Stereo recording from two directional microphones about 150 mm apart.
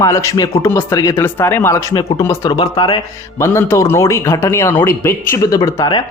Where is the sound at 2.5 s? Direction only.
30° left (ahead or behind).